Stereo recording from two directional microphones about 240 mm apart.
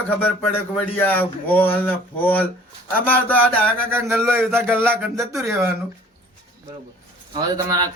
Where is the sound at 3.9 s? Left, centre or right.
Centre.